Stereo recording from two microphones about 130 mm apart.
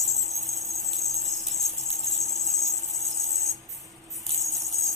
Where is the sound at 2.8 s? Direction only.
25° right (ahead or behind).